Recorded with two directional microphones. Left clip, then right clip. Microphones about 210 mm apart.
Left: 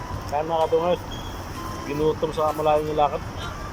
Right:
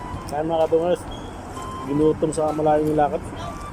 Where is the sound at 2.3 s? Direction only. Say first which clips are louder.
Right 1 dB; 20° right (ahead or behind).